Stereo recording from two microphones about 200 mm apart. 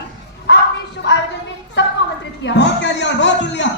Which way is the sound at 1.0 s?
60° left (ahead or behind).